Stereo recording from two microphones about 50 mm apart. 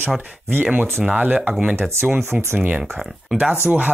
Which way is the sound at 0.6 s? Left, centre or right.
Right.